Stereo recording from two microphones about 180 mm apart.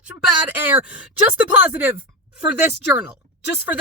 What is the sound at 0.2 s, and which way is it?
A woman's voice, 10° right (ahead or behind).